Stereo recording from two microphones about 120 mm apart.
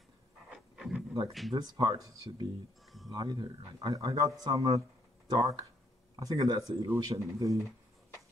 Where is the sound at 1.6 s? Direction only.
30° right (ahead or behind).